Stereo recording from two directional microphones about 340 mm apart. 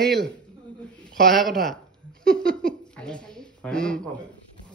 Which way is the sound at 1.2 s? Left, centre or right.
Centre.